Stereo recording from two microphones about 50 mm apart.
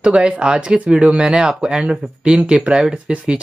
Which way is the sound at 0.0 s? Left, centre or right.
Right.